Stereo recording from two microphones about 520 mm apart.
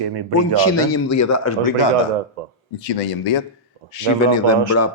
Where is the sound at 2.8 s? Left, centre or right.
Left.